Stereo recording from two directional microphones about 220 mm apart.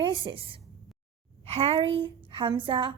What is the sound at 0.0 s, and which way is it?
A woman's voice, 20° right (ahead or behind).